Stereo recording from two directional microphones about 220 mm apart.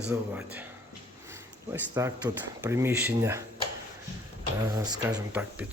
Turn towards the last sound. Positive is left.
turn(degrees=-5)  # may be behind; listen again after turning